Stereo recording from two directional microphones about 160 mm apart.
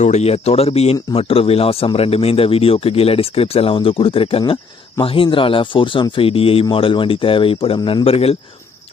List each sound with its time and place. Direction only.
0.0 s speech: 45° left (ahead or behind)